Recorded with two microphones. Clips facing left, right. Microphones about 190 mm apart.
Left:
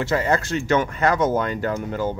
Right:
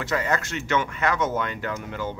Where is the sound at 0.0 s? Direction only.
30° left (ahead or behind).